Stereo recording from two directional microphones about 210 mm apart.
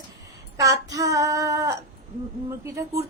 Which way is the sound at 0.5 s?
15° right (ahead or behind).